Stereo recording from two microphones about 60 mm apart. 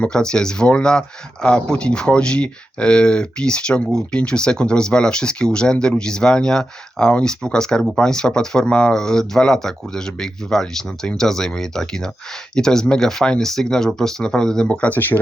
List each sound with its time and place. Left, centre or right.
0.0 s speech: centre